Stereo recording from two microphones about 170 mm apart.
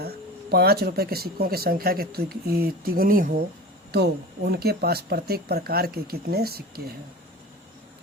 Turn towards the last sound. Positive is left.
turn(degrees=-65)  # may be behind; listen again after turning